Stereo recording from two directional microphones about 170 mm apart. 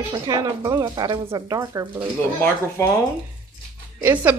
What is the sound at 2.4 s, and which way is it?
Speech, 15° left (ahead or behind).